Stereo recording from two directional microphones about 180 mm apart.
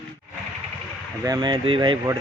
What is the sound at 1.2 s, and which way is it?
Speech, 25° right (ahead or behind).